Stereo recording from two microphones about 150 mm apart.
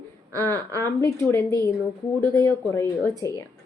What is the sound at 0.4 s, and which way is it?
A woman's voice, 15° left (ahead or behind).